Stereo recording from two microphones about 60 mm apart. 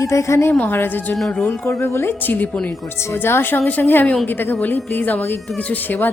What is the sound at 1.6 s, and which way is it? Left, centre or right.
Speech, left.